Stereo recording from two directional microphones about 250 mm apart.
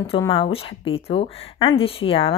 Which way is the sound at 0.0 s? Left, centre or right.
Left.